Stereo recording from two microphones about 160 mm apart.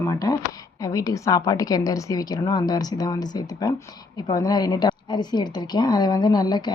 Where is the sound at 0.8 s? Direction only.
20° left (ahead or behind).